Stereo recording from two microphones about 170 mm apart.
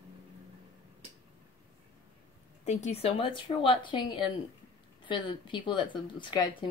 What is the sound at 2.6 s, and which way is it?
Speech, 40° left (ahead or behind).